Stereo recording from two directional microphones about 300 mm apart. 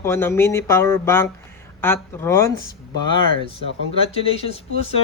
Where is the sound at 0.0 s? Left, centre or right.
Centre.